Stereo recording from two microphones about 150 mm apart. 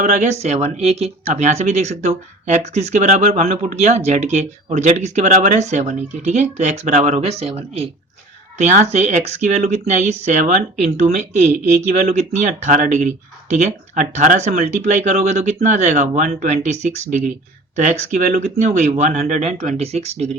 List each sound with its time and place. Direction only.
0.0 s speech: 50° right (ahead or behind)